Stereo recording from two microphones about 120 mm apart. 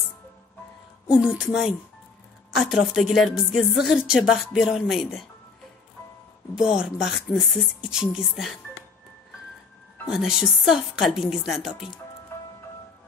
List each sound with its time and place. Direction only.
1.1 s speech: 5° right (ahead or behind)
6.5 s speech: 5° right (ahead or behind)
10.0 s speech: 5° right (ahead or behind)
12.3 s music: 20° left (ahead or behind)